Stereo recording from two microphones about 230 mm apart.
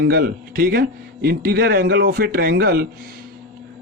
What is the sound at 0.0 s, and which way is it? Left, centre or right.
Speech, right.